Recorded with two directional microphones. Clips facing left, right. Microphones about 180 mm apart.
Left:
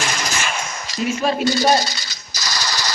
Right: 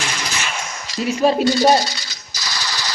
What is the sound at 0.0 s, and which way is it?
Machine gun, 45° left (ahead or behind).